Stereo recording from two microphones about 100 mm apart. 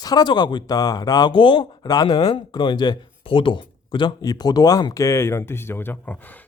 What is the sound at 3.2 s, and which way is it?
Speech, 60° left (ahead or behind).